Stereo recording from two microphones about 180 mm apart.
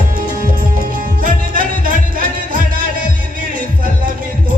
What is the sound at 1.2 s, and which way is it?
Music, 50° right (ahead or behind).